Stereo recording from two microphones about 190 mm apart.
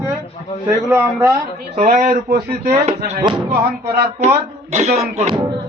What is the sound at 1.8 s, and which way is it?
Speech, 45° right (ahead or behind).